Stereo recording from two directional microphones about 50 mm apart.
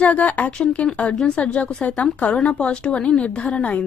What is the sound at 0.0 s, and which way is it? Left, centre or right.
A woman's voice, left.